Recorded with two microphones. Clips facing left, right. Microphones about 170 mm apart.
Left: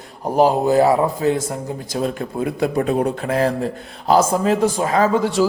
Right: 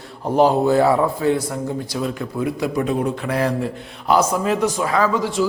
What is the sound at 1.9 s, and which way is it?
Speech, 50° left (ahead or behind).